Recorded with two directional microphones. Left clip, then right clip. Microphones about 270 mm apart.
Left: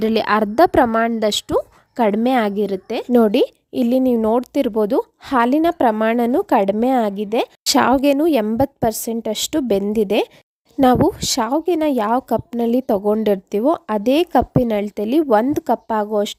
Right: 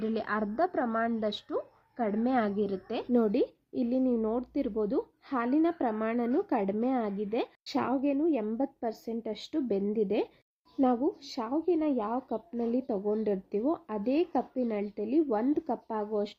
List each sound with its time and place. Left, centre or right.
0.0 s a woman's voice: left